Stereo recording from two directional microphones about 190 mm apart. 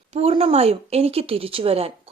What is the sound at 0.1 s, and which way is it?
Speech, 30° right (ahead or behind).